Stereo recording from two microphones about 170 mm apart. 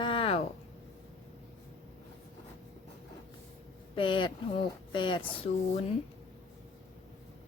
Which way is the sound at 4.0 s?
30° left (ahead or behind).